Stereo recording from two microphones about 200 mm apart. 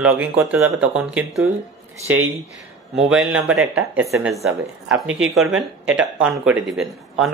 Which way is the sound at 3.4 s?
90° right.